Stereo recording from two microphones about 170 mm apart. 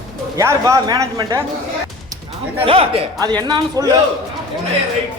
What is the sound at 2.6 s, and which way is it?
A man's voice, 35° right (ahead or behind).